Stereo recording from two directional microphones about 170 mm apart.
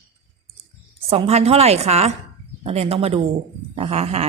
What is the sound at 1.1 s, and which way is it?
A woman's voice, 35° right (ahead or behind).